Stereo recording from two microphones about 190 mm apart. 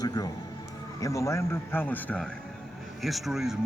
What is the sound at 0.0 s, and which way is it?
Music, 20° left (ahead or behind).